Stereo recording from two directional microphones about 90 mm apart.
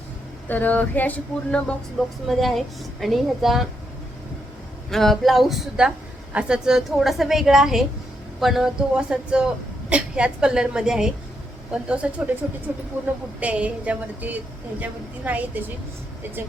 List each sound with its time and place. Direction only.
0.4 s a sound: 20° left (ahead or behind)
2.2 s a woman's voice: centre (ahead or behind)
4.9 s a woman's voice: 5° left (ahead or behind); by 12.3 s 15° right (ahead or behind)
13.4 s a woman's voice: 15° right (ahead or behind)